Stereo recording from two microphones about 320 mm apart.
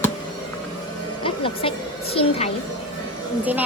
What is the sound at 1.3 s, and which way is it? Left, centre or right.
Speech, centre.